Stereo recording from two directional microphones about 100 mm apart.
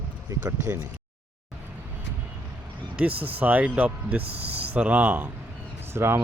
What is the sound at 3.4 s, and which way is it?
Speech, 15° right (ahead or behind).